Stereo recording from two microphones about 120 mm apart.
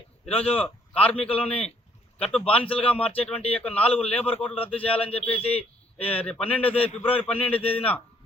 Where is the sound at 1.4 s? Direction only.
55° left (ahead or behind).